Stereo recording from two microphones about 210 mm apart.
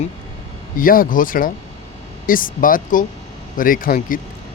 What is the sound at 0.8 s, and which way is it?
Speech, 40° left (ahead or behind).